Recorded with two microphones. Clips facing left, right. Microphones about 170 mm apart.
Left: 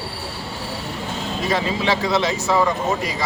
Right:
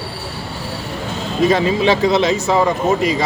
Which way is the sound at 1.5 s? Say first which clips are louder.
Right 4 dB; 20° right (ahead or behind).